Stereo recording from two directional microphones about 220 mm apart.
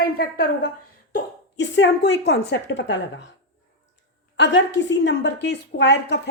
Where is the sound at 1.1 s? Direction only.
55° left (ahead or behind).